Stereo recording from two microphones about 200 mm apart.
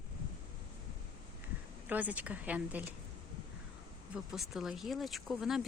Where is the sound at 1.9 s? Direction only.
5° right (ahead or behind).